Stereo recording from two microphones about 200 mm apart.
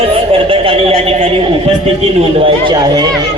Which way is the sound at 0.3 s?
25° right (ahead or behind).